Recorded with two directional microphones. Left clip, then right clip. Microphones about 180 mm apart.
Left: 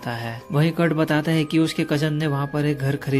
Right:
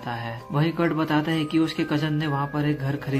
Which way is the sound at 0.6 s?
35° left (ahead or behind).